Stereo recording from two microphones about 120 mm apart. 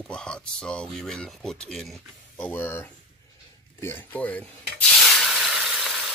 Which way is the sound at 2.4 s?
15° left (ahead or behind).